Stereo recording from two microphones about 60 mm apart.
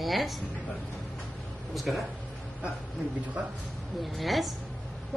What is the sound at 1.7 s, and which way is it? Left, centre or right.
Speech, centre.